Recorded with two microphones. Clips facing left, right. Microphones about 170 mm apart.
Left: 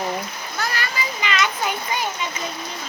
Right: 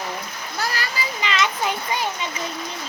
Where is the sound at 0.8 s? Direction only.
30° right (ahead or behind).